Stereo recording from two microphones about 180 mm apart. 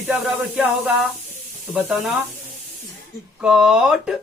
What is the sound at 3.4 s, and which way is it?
Speech, 5° right (ahead or behind).